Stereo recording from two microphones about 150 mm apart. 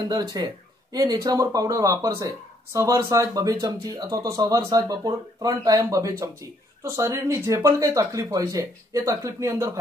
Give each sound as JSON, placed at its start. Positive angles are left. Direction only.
{"t": 0.1, "sound": "speech", "side_deg": -25}